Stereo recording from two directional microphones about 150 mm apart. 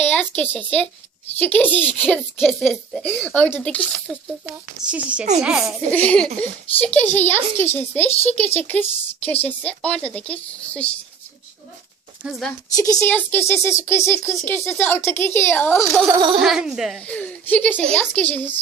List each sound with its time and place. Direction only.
0.0 s speech: 10° left (ahead or behind)
4.0 s a child's voice: 5° right (ahead or behind)
5.9 s speech: 10° left (ahead or behind)
12.2 s speech: centre (ahead or behind)
12.7 s speech: 20° left (ahead or behind)
16.1 s speech: 30° right (ahead or behind)
16.4 s speech: centre (ahead or behind)
17.0 s speech: 10° left (ahead or behind)